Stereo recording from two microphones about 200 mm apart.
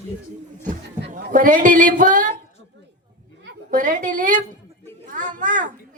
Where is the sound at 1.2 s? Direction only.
40° right (ahead or behind).